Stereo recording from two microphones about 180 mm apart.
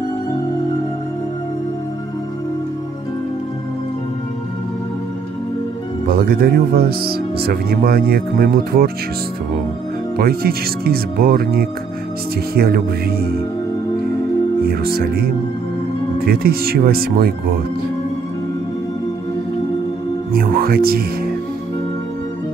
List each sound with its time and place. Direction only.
6.0 s speech: 55° right (ahead or behind)
10.1 s speech: 60° right (ahead or behind)
14.7 s speech: 55° right (ahead or behind)
20.3 s music: 55° right (ahead or behind)